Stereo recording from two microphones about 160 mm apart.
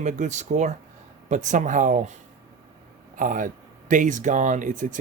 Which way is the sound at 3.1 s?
55° right (ahead or behind).